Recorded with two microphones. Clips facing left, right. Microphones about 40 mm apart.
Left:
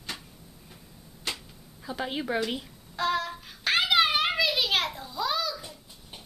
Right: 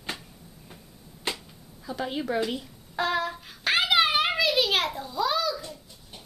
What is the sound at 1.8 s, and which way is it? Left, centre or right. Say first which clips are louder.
Speech: right 1 dB; centre.